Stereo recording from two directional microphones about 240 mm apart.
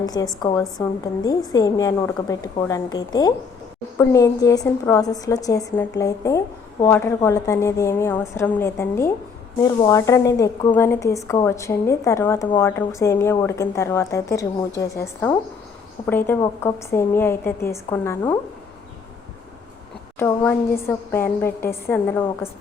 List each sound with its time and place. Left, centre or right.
0.0 s speech: centre
20.1 s speech: centre